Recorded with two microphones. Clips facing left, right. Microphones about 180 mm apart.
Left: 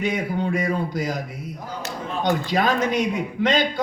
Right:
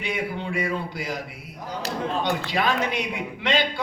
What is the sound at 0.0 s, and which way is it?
A man's voice, 45° left (ahead or behind).